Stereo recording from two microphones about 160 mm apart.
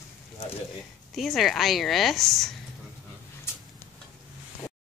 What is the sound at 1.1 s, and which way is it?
A woman's voice, centre (ahead or behind).